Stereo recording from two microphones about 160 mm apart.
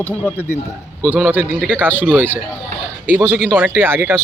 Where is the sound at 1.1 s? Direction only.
10° right (ahead or behind).